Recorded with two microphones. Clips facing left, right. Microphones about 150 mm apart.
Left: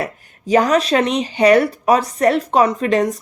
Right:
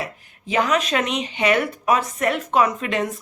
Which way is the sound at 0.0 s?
40° left (ahead or behind).